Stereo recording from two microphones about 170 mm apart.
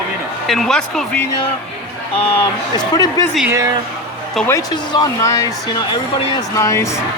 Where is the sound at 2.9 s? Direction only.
20° left (ahead or behind).